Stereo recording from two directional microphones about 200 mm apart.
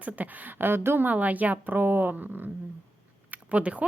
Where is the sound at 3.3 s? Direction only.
5° right (ahead or behind).